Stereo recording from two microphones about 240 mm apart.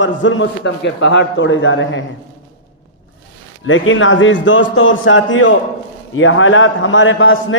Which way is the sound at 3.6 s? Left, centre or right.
Left.